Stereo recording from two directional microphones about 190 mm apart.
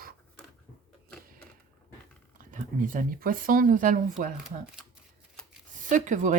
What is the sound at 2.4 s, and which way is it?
Speech, 45° right (ahead or behind).